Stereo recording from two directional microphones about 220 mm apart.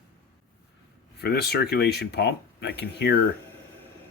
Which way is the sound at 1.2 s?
45° left (ahead or behind).